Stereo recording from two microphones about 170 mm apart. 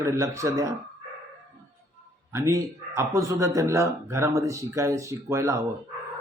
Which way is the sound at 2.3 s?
15° right (ahead or behind).